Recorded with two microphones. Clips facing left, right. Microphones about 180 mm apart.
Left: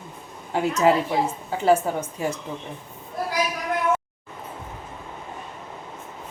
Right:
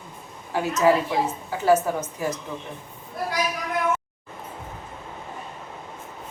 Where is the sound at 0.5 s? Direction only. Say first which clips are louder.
Even; 25° left (ahead or behind).